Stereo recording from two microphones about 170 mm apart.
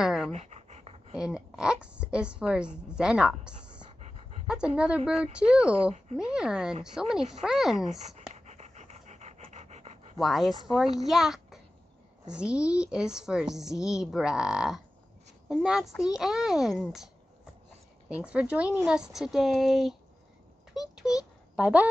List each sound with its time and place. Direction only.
0.0 s dog: centre (ahead or behind)
0.3 s dog: 40° right (ahead or behind)
1.1 s a woman's voice: 5° right (ahead or behind)
4.0 s dog: 40° right (ahead or behind)
4.5 s a woman's voice: 5° right (ahead or behind)
8.0 s pant: 40° right (ahead or behind)
10.1 s a woman's voice: centre (ahead or behind)
20.7 s a sound: 5° right (ahead or behind)